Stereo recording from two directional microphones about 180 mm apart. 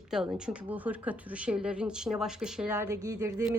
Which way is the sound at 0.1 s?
5° right (ahead or behind).